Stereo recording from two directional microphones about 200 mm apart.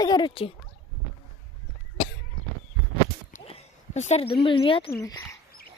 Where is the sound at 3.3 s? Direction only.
30° left (ahead or behind).